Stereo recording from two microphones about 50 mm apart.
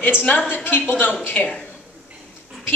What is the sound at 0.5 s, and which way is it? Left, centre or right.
Speech, left.